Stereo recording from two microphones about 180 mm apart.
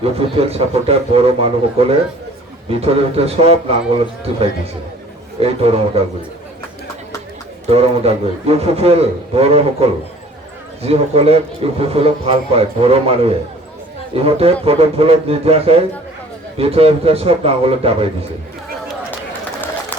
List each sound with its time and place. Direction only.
0.0 s a man's voice: 35° right (ahead or behind)
7.7 s a man's voice: 35° right (ahead or behind)